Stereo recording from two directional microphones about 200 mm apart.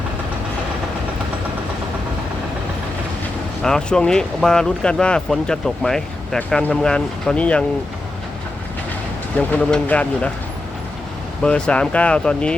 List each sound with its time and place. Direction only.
3.6 s speech: 5° left (ahead or behind)
9.5 s speech: 5° left (ahead or behind)
11.4 s speech: 5° left (ahead or behind)